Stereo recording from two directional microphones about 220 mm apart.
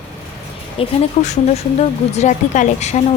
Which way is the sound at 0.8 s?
30° left (ahead or behind).